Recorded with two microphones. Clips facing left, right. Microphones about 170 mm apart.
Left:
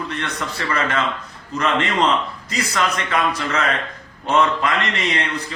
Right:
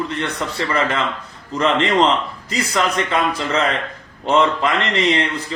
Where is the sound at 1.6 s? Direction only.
25° right (ahead or behind).